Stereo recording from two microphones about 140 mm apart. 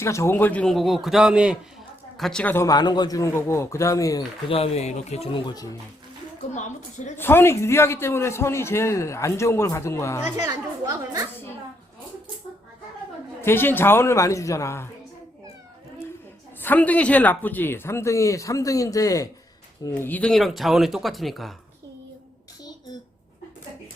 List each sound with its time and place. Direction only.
0.0 s speech: 20° left (ahead or behind)
2.6 s a man's voice: 30° left (ahead or behind)
4.4 s speech: 45° left (ahead or behind); by 5.7 s 30° left (ahead or behind)
6.5 s a woman's voice: 60° left (ahead or behind)
7.2 s a man's voice: 15° left (ahead or behind)
10.4 s a woman's voice: 25° right (ahead or behind)
13.4 s speech: 15° left (ahead or behind)
16.6 s a man's voice: 10° left (ahead or behind)
19.9 s speech: 10° left (ahead or behind)